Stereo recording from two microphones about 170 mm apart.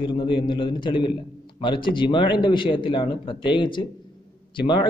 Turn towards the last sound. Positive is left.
turn(degrees=25)  # may be behind; listen again after turning